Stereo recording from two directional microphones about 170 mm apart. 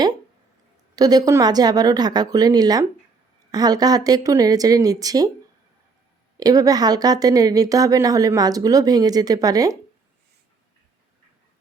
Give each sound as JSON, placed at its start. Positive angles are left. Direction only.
{"t": 0.9, "sound": "speech", "side_deg": -20}
{"t": 6.3, "sound": "speech", "side_deg": -20}